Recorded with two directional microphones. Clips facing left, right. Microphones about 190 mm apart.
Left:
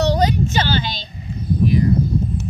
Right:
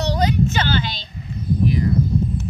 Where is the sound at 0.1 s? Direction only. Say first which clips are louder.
Left 2 dB; 35° left (ahead or behind).